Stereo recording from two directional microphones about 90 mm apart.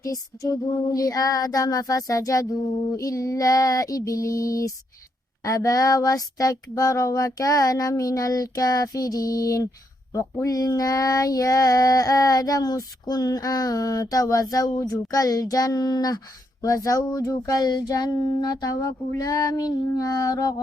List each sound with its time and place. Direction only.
0.0 s child singing: 35° left (ahead or behind)
15.1 s speech: 40° left (ahead or behind)